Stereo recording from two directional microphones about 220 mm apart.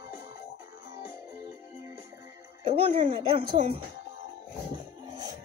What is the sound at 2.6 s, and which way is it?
A woman's voice, 25° right (ahead or behind).